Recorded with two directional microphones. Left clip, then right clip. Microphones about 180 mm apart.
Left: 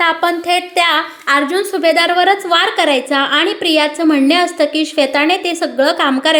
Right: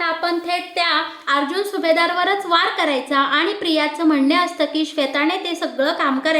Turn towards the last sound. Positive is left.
turn(degrees=35)  # may be behind; listen again after turning